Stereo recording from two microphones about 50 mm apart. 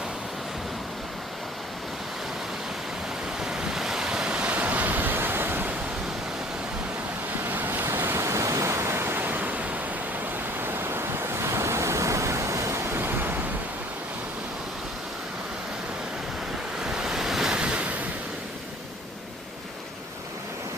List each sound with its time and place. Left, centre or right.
3.4 s waves: centre; by 5.7 s right
7.4 s waves: right
9.1 s waves: right
10.6 s waves: right
16.8 s waves: centre
17.5 s waves: centre